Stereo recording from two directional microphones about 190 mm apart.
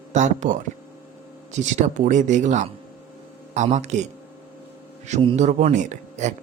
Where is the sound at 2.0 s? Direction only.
40° right (ahead or behind).